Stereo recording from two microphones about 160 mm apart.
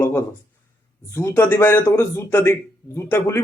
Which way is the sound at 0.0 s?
15° left (ahead or behind).